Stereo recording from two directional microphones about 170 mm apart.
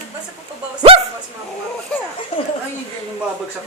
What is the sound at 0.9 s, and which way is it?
Dog, 35° right (ahead or behind).